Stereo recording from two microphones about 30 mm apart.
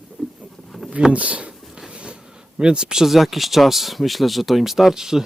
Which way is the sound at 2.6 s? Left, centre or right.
Right.